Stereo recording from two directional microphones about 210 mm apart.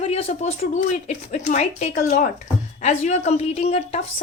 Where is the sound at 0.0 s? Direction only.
30° left (ahead or behind).